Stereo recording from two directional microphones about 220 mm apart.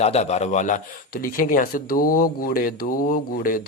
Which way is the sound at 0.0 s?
30° left (ahead or behind).